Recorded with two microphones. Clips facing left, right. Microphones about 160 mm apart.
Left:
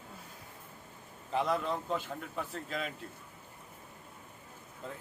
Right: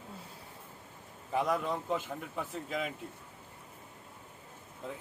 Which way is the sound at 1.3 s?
10° right (ahead or behind).